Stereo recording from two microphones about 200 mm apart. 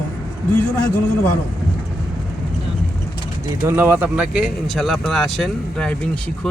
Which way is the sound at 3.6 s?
10° right (ahead or behind).